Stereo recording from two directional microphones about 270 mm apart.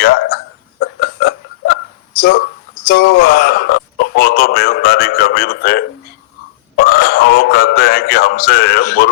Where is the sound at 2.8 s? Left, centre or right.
Left.